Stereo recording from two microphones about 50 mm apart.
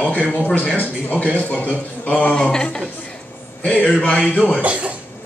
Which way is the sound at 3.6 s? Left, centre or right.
Left.